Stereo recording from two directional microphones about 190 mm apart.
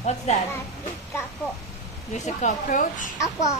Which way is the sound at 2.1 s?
40° left (ahead or behind).